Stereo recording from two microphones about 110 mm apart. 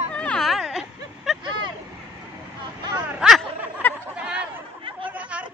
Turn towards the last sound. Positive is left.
turn(degrees=-10)  # may be behind; listen again after turning